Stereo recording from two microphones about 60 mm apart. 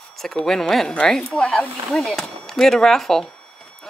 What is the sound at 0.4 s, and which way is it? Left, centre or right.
Speech, centre.